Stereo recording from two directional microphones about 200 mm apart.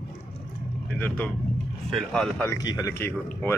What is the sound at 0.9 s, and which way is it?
Speech, 5° left (ahead or behind).